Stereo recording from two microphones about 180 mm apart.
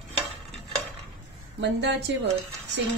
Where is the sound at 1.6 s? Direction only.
75° right (ahead or behind).